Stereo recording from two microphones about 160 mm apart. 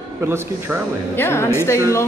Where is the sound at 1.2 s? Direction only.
15° left (ahead or behind).